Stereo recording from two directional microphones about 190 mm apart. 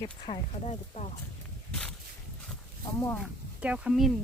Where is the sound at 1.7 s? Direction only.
5° left (ahead or behind).